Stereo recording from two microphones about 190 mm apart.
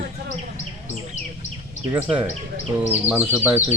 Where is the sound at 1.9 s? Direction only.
5° right (ahead or behind).